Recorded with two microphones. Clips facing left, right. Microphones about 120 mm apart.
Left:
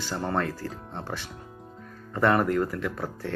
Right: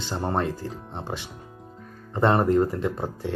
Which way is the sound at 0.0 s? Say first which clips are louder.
Right 2 dB; 20° right (ahead or behind).